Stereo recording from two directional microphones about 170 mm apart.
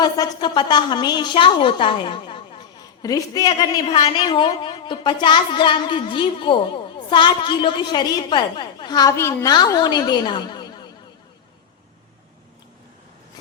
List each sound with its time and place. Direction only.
0.0 s a woman's voice: 25° left (ahead or behind)